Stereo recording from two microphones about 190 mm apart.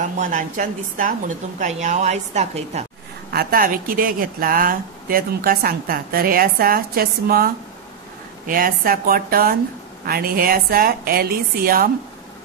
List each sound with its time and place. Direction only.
0.0 s a woman's voice: 40° right (ahead or behind)
3.3 s speech: 50° right (ahead or behind)